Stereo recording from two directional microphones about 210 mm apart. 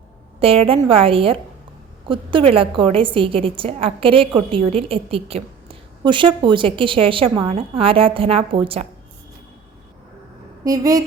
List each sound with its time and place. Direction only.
0.3 s a woman's voice: 25° right (ahead or behind)
10.6 s speech: 15° right (ahead or behind)